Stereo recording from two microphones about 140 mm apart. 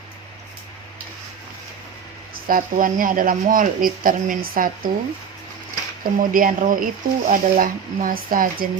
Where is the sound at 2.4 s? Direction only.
85° right.